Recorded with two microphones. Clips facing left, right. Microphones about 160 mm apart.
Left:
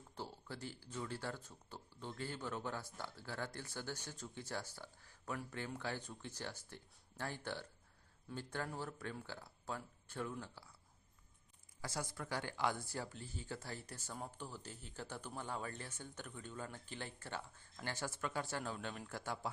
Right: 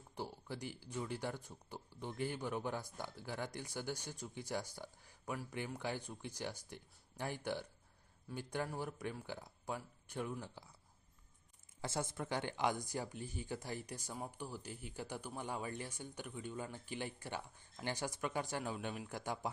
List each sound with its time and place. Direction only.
0.2 s speech: 15° right (ahead or behind)
11.8 s speech: 25° right (ahead or behind)